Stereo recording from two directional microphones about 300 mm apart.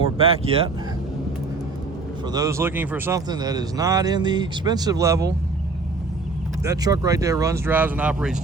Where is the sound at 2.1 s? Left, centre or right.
Centre.